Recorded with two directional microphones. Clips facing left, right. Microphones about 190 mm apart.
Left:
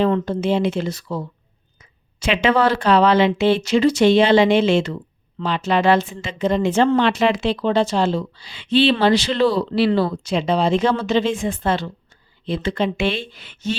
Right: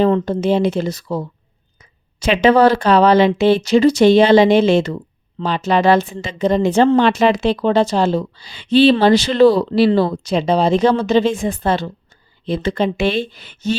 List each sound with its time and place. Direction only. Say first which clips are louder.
0.0 s speech: right 3 dB; 40° right (ahead or behind)